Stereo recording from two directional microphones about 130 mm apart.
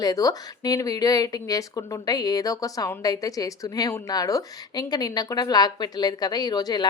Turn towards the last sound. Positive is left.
turn(degrees=30)  # may be behind; listen again after turning